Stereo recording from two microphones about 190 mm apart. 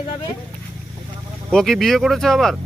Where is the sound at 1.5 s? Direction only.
Centre (ahead or behind).